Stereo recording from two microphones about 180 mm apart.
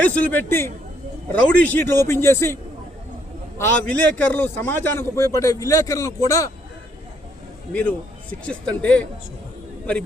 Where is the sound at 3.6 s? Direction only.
10° left (ahead or behind).